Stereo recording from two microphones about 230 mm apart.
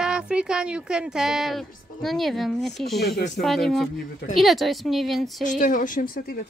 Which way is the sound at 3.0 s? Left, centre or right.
Left.